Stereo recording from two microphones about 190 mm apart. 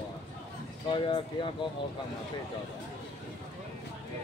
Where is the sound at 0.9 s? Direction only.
25° left (ahead or behind).